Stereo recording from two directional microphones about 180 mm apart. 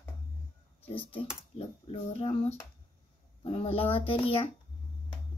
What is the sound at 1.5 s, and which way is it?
A child's voice, 35° left (ahead or behind).